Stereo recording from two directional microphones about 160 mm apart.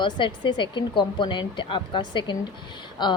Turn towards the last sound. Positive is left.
turn(degrees=25)  # may be behind; listen again after turning